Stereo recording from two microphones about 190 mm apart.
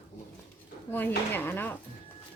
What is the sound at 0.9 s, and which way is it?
Speech, 10° left (ahead or behind).